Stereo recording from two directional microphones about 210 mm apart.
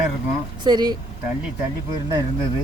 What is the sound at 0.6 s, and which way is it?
Speech, 20° right (ahead or behind).